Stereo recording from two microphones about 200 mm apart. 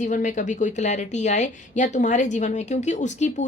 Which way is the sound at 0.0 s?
40° left (ahead or behind).